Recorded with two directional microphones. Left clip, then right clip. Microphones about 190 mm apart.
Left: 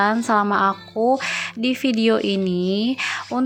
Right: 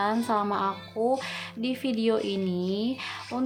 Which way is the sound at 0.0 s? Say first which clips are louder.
Left 8 dB; 30° left (ahead or behind).